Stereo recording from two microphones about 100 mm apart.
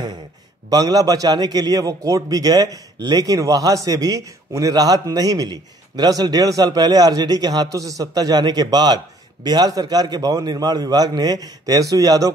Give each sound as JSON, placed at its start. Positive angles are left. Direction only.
{"t": 0.7, "sound": "a man's voice", "side_deg": -40}